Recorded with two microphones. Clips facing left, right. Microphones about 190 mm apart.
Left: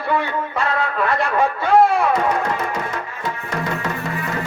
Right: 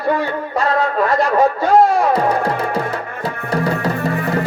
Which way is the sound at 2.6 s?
30° right (ahead or behind).